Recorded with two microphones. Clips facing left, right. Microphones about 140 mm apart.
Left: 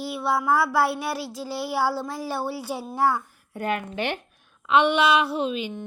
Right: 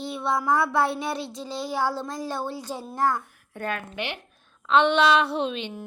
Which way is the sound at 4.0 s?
40° left (ahead or behind).